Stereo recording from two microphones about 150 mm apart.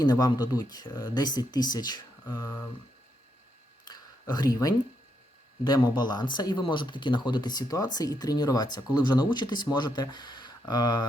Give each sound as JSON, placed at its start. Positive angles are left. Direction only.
{"t": 0.0, "sound": "speech", "side_deg": 25}
{"t": 3.8, "sound": "a sound", "side_deg": 25}
{"t": 5.6, "sound": "speech", "side_deg": 25}